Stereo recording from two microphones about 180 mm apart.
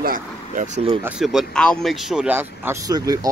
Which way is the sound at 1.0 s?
5° right (ahead or behind).